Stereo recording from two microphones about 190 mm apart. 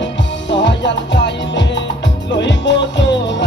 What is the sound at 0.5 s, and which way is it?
Music, 65° left (ahead or behind).